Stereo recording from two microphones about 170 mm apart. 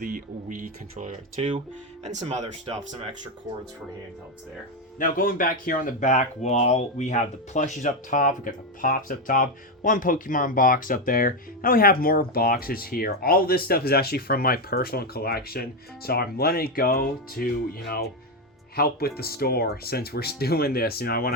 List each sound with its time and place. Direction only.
0.0 s speech: 50° right (ahead or behind)
2.2 s speech: 30° right (ahead or behind)
4.9 s speech: 55° left (ahead or behind)